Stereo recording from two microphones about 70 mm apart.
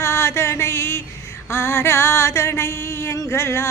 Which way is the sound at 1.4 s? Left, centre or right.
Left.